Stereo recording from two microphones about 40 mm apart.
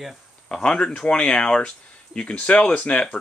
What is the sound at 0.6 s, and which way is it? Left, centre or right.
Speech, left.